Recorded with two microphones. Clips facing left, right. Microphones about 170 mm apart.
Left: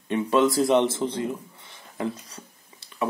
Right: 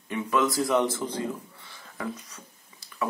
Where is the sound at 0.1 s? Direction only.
30° left (ahead or behind).